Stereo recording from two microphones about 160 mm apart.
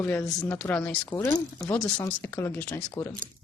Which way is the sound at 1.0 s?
25° left (ahead or behind).